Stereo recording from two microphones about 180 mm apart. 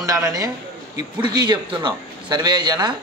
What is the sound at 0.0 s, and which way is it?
A man's voice, 20° right (ahead or behind).